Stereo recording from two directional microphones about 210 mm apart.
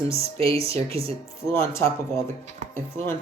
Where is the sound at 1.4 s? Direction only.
10° left (ahead or behind).